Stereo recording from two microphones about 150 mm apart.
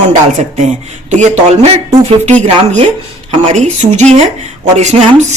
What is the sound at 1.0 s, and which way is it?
Speech, 50° right (ahead or behind).